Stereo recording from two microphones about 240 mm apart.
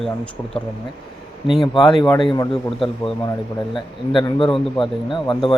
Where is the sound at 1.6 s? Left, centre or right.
Left.